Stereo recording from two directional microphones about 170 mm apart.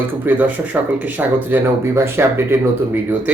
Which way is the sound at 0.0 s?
10° right (ahead or behind).